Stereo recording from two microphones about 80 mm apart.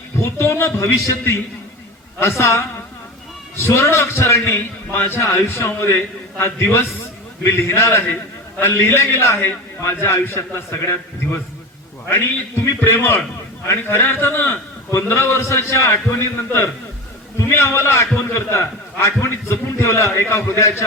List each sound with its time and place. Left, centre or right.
0.2 s a man's voice: left
3.6 s a man's voice: left